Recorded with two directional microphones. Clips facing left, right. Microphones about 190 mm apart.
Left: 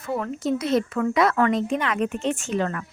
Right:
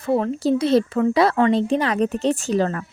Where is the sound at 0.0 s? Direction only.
30° right (ahead or behind).